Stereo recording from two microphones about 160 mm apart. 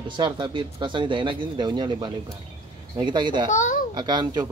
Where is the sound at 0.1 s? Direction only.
30° right (ahead or behind).